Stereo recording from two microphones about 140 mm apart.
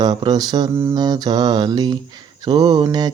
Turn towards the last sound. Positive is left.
turn(degrees=-30)  # may be behind; listen again after turning